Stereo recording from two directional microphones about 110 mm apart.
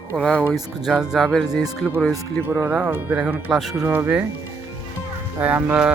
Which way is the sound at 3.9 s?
15° right (ahead or behind).